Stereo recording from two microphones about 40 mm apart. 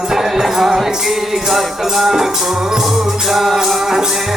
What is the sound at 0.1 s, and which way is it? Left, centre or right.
Music, centre.